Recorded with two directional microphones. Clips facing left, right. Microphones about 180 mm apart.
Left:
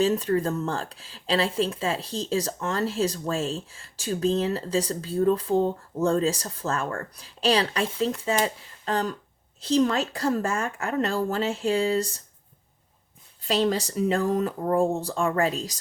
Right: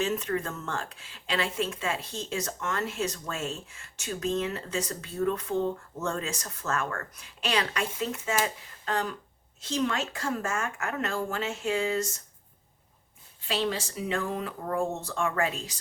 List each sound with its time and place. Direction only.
0.0 s speech: 35° left (ahead or behind)
13.4 s speech: 40° left (ahead or behind)